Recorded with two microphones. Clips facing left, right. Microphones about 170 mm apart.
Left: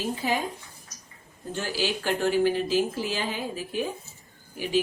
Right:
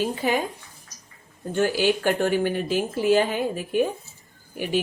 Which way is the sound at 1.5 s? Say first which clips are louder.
Right 8 dB; 55° right (ahead or behind).